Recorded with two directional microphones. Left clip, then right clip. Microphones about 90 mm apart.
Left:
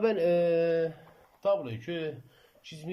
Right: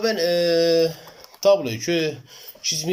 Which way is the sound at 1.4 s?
60° right (ahead or behind).